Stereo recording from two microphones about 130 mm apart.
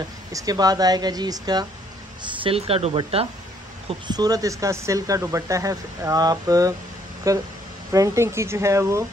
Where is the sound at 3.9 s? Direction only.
30° right (ahead or behind).